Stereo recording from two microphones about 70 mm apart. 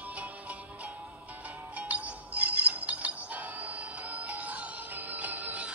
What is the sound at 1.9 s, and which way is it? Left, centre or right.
Music, right.